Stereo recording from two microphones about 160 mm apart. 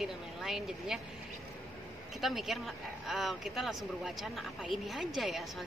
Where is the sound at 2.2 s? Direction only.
Centre (ahead or behind).